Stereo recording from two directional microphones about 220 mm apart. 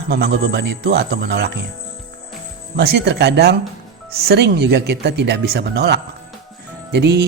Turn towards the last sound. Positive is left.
turn(degrees=-50)  # may be behind; listen again after turning